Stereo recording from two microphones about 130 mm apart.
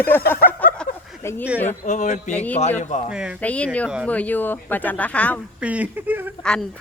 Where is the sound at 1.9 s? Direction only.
70° left (ahead or behind).